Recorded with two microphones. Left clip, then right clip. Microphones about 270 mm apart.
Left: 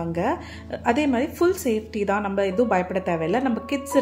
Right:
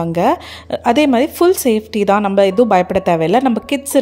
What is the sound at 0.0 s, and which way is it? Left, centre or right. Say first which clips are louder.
A woman's voice: right 10 dB; right.